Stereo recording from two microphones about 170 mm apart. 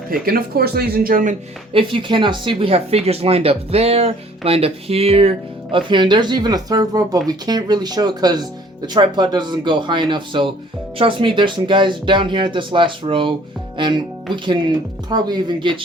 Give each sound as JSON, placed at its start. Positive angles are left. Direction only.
{"t": 0.1, "sound": "speech", "side_deg": -60}
{"t": 1.7, "sound": "speech", "side_deg": -30}